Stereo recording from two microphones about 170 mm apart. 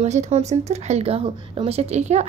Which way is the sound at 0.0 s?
40° right (ahead or behind).